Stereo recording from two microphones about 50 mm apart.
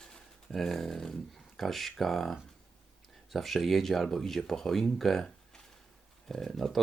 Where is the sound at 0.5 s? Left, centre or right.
Centre.